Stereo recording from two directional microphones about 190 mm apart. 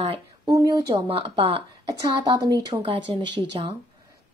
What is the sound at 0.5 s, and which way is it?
A woman's voice, 20° right (ahead or behind).